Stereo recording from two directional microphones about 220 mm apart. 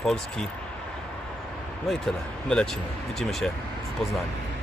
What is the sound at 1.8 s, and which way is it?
Speech, centre (ahead or behind).